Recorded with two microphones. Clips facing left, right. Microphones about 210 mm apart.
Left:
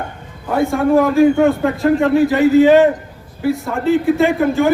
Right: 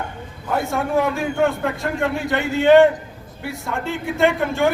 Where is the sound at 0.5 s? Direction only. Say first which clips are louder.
Left 7 dB; centre (ahead or behind).